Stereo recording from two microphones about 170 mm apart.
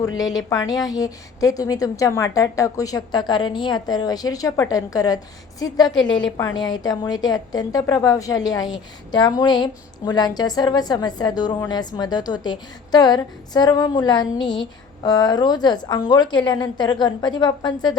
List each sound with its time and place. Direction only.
0.0 s a woman's voice: 20° left (ahead or behind)
5.9 s a woman's voice: 90° left
6.3 s a woman's voice: 25° left (ahead or behind)